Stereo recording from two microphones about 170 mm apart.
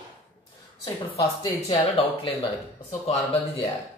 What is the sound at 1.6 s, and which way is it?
Speech, 35° left (ahead or behind).